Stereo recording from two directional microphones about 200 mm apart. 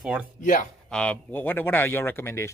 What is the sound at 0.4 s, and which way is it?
Speech, 40° left (ahead or behind).